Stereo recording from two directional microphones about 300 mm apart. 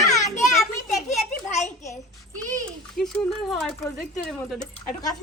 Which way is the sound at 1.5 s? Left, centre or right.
Left.